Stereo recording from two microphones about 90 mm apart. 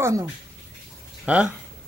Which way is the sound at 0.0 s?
30° right (ahead or behind).